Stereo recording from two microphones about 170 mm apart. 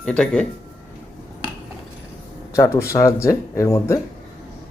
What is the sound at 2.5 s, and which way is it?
Speech, 15° left (ahead or behind).